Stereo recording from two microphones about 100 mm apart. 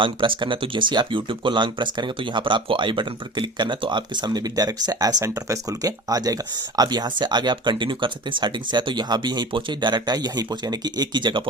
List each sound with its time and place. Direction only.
0.0 s speech: 55° right (ahead or behind)